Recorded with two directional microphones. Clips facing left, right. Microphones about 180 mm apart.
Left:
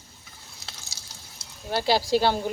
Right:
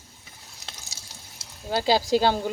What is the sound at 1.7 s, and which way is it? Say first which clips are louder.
Speech: right 1 dB; 15° right (ahead or behind).